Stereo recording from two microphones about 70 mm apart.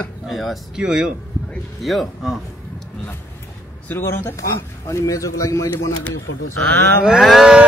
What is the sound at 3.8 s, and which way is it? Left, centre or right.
Speech, left.